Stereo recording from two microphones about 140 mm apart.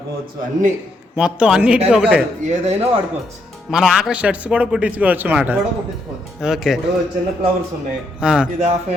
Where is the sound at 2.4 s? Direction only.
55° right (ahead or behind).